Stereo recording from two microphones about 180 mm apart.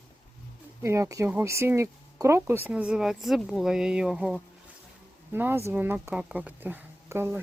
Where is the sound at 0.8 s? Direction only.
15° right (ahead or behind).